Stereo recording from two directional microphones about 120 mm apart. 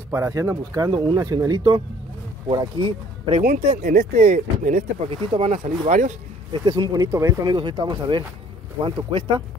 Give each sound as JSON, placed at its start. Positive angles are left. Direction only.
{"t": 0.1, "sound": "speech", "side_deg": -25}
{"t": 3.3, "sound": "speech", "side_deg": -65}
{"t": 5.1, "sound": "speech", "side_deg": -45}
{"t": 5.5, "sound": "speech", "side_deg": -70}
{"t": 6.5, "sound": "speech", "side_deg": -30}
{"t": 7.4, "sound": "speech", "side_deg": -35}